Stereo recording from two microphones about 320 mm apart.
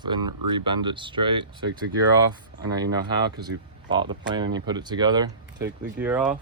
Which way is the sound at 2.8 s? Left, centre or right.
Centre.